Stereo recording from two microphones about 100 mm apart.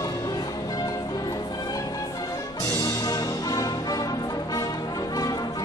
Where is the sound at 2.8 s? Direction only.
35° left (ahead or behind).